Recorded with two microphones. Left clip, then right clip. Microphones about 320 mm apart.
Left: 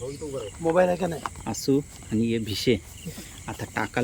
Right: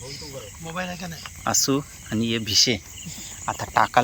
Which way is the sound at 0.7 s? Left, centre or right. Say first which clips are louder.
Left 10 dB; left.